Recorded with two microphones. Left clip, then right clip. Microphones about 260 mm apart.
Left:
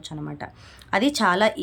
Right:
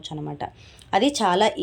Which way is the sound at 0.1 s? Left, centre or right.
Centre.